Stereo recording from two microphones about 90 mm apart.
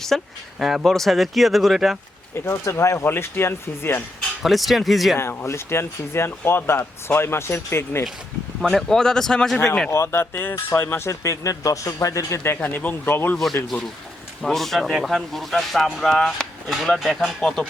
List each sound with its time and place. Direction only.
0.1 s speech: 5° left (ahead or behind)
2.3 s speech: 30° left (ahead or behind)
4.4 s speech: centre (ahead or behind)
5.1 s speech: 25° left (ahead or behind)
8.6 s a man's voice: 5° left (ahead or behind)
9.9 s speech: 30° left (ahead or behind)
12.5 s speech: 20° left (ahead or behind)
13.3 s speech: 5° left (ahead or behind)